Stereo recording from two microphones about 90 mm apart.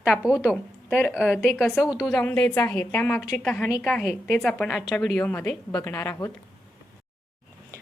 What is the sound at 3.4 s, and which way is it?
A woman's voice, 5° left (ahead or behind).